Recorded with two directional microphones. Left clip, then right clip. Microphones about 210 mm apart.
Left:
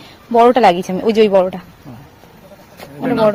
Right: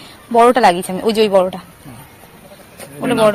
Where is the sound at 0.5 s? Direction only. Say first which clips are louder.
Left 1 dB; 25° left (ahead or behind).